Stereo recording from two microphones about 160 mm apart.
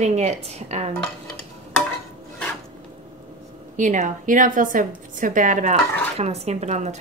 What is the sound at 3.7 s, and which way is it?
Speech, 50° right (ahead or behind).